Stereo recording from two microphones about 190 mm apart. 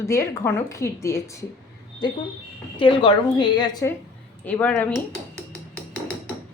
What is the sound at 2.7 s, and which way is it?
A woman's voice, 25° left (ahead or behind).